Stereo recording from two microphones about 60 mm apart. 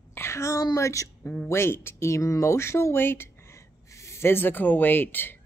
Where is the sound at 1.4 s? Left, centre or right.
Left.